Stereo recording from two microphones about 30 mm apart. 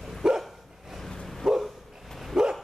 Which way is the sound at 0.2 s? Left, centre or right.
Centre.